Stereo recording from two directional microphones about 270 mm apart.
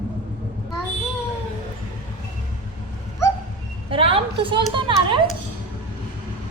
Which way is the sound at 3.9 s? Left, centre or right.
Centre.